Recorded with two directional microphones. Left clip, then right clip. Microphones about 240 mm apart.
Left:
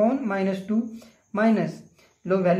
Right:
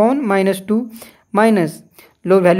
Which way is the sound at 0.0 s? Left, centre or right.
Right.